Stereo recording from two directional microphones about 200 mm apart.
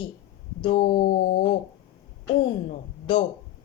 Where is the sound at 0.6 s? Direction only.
25° left (ahead or behind).